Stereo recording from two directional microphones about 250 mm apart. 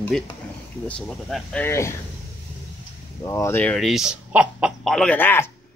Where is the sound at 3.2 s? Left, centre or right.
Centre.